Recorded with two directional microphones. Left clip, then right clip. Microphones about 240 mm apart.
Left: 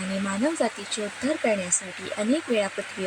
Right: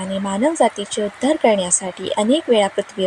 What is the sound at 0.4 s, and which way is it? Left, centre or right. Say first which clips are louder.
Speech: right 10 dB; centre.